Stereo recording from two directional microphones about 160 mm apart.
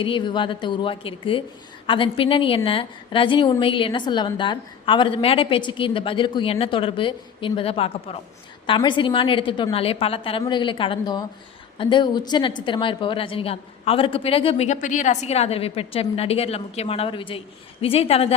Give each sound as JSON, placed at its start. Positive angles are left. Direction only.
{"t": 0.0, "sound": "a woman's voice", "side_deg": 30}